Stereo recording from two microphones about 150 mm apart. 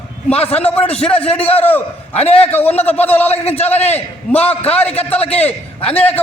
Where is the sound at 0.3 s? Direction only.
40° left (ahead or behind).